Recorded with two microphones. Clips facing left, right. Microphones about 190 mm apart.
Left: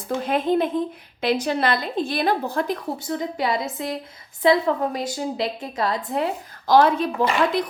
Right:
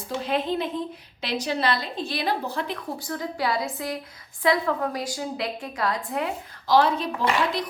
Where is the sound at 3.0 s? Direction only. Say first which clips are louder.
Left 3 dB; 20° left (ahead or behind).